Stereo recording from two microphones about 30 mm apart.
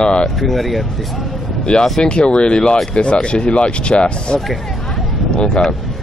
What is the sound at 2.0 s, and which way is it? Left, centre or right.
Speech, left.